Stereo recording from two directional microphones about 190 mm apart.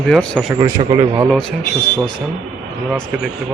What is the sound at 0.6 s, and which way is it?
Speech, 25° right (ahead or behind).